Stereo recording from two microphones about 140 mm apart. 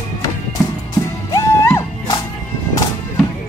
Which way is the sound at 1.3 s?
25° left (ahead or behind).